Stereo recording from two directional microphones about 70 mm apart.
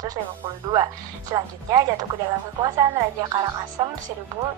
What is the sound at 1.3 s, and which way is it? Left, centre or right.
Speech, right.